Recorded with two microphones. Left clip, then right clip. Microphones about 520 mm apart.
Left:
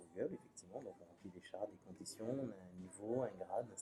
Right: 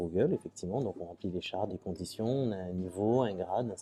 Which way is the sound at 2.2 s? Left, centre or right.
Right.